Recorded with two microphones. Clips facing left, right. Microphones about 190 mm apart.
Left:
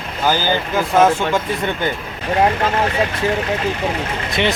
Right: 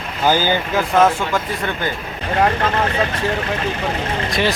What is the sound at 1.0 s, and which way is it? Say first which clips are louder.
Speech: left 1 dB; 15° left (ahead or behind).